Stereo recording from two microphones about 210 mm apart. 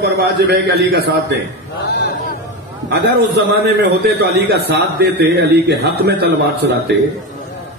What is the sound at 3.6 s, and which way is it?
A man's voice, 50° right (ahead or behind).